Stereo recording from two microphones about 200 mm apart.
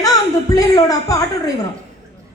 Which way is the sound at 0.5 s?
20° left (ahead or behind).